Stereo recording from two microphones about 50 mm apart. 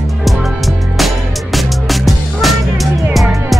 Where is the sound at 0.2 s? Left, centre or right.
Centre.